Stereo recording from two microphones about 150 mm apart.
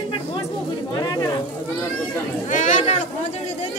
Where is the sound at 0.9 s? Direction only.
25° left (ahead or behind).